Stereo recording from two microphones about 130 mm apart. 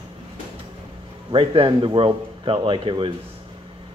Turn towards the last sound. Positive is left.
turn(degrees=-40)  # may be behind; listen again after turning